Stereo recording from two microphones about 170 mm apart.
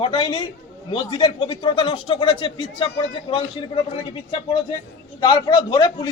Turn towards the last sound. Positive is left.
turn(degrees=25)  # may be behind; listen again after turning